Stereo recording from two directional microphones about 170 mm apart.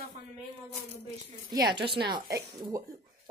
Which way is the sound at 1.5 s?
25° right (ahead or behind).